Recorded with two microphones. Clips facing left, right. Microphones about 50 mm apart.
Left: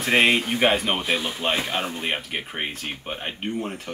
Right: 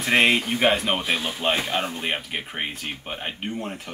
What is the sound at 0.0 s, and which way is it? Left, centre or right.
Speech, centre.